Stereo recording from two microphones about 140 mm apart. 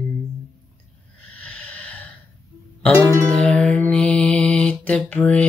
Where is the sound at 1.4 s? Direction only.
10° left (ahead or behind).